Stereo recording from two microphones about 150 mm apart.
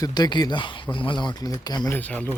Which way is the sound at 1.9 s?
10° left (ahead or behind).